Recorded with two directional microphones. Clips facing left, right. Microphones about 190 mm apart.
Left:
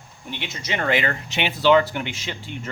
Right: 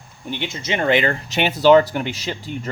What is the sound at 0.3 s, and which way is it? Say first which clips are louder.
Speech: right 5 dB; 30° right (ahead or behind).